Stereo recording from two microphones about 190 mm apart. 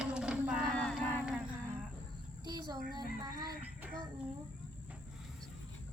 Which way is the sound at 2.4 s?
20° right (ahead or behind).